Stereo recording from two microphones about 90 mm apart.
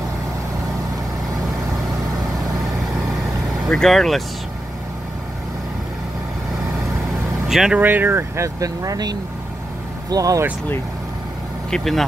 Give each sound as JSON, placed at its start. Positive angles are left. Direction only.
{"t": 3.6, "sound": "speech", "side_deg": 5}
{"t": 7.4, "sound": "speech", "side_deg": -5}
{"t": 7.8, "sound": "speech", "side_deg": -20}
{"t": 11.7, "sound": "speech", "side_deg": 5}